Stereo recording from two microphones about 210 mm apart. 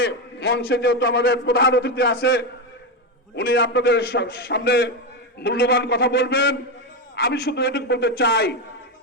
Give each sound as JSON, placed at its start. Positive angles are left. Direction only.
{"t": 0.0, "sound": "a man's voice", "side_deg": 50}